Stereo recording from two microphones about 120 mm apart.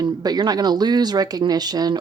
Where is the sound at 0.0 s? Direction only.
35° right (ahead or behind).